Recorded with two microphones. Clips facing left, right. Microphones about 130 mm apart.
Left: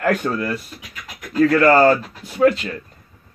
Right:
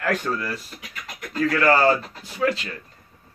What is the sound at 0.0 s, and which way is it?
Speech, 50° left (ahead or behind).